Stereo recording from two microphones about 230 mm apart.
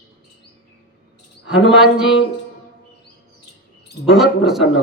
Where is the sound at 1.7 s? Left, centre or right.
Centre.